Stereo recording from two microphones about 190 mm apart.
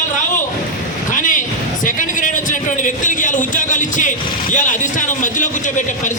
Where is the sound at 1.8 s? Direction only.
45° left (ahead or behind).